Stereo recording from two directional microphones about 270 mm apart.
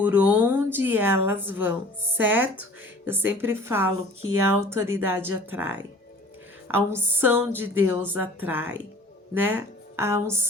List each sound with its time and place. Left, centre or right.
0.0 s a woman's voice: centre